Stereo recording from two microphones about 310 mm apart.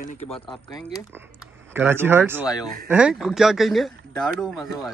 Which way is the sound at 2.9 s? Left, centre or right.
Centre.